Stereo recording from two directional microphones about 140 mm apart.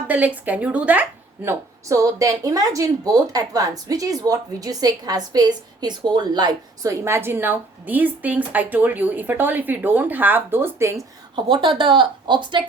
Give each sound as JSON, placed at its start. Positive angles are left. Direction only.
{"t": 0.1, "sound": "speech", "side_deg": -10}
{"t": 1.5, "sound": "speech", "side_deg": -20}
{"t": 11.4, "sound": "speech", "side_deg": -35}